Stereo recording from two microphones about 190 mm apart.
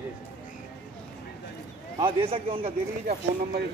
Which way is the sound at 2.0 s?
30° right (ahead or behind).